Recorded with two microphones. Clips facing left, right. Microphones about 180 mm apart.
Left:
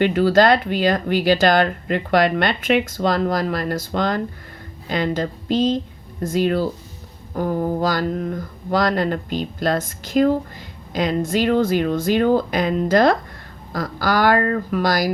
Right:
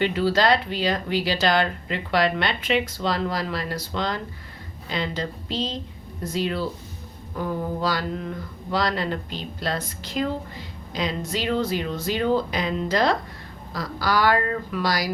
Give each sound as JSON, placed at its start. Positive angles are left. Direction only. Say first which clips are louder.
{"t": 0.0, "sound": "speech", "louder": "left 6 dB", "side_deg": 50}